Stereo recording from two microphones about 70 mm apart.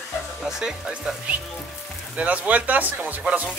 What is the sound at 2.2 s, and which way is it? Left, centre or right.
Speech, right.